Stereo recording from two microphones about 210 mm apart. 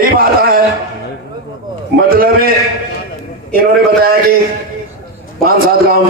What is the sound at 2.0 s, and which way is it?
Speech, 45° right (ahead or behind).